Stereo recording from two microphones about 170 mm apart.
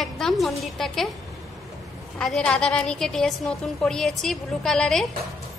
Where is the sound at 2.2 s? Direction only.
5° left (ahead or behind).